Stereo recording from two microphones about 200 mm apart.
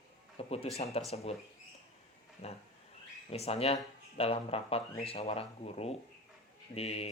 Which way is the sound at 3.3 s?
30° left (ahead or behind).